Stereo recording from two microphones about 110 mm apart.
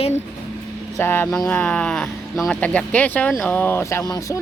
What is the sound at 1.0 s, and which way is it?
Speech, 20° left (ahead or behind).